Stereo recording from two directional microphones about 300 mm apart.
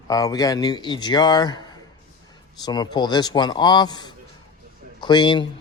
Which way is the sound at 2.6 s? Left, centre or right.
Centre.